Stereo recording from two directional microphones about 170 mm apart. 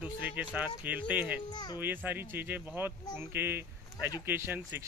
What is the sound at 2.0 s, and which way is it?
Speech, 10° right (ahead or behind).